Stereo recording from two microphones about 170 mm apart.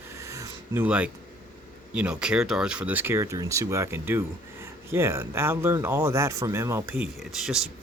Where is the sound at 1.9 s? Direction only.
5° right (ahead or behind).